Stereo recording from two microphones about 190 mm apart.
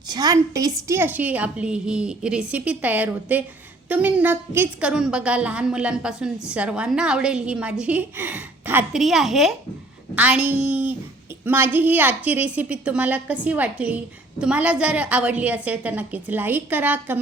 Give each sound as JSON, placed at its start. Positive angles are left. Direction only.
{"t": 0.1, "sound": "a woman's voice", "side_deg": -20}